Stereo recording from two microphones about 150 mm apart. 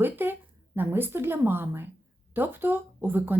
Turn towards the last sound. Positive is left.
turn(degrees=-15)  # may be behind; listen again after turning